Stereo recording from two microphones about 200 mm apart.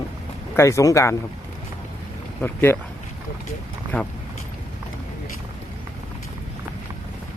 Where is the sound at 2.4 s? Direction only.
10° left (ahead or behind).